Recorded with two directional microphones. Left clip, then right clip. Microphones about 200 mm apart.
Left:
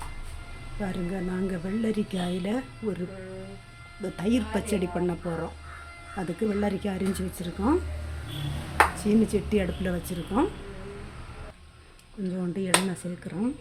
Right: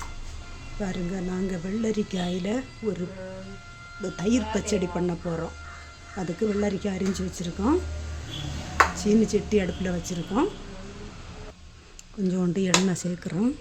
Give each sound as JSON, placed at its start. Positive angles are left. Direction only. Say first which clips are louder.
{"t": 0.8, "sound": "speech", "louder": "right 1 dB", "side_deg": -5}
{"t": 4.0, "sound": "speech", "louder": "right 2 dB", "side_deg": -5}
{"t": 9.0, "sound": "speech", "louder": "right 2 dB", "side_deg": -10}
{"t": 12.4, "sound": "speech", "louder": "right 1 dB", "side_deg": -25}